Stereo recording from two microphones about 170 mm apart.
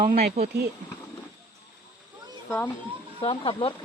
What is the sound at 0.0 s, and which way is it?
Speech, 45° right (ahead or behind).